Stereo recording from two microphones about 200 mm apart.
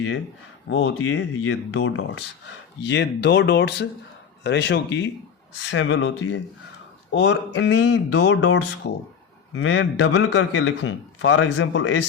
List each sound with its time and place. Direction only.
0.7 s speech: 90° left
2.8 s speech: 60° left (ahead or behind)
5.7 s a man's voice: 75° left (ahead or behind)
7.1 s a man's voice: 60° left (ahead or behind)